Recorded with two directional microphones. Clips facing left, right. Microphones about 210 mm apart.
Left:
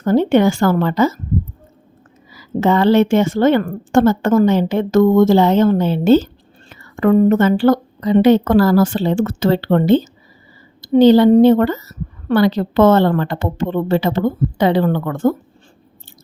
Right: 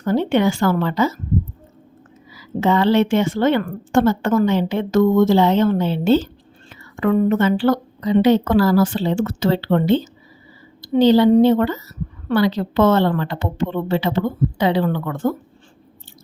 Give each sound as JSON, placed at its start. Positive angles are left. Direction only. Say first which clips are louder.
{"t": 0.0, "sound": "a woman's voice", "louder": "left 4 dB", "side_deg": 45}
{"t": 2.3, "sound": "a woman's voice", "louder": "left 3 dB", "side_deg": 45}